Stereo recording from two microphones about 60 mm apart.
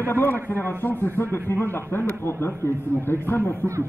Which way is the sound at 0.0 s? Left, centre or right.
Left.